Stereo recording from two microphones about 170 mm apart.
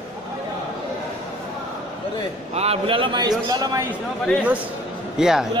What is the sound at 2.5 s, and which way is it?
A man's voice, 35° right (ahead or behind).